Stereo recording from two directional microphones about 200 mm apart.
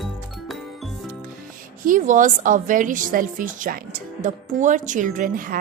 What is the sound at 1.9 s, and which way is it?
A woman's voice, 40° right (ahead or behind).